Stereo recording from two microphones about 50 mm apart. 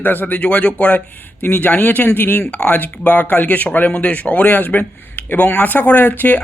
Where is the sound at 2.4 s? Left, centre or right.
Left.